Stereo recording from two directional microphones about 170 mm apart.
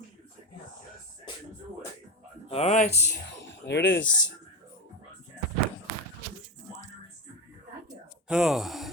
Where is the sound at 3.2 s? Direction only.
90° left.